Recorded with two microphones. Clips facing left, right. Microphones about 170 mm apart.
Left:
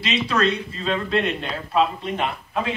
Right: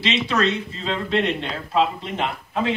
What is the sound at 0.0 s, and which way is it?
Speech, 25° right (ahead or behind).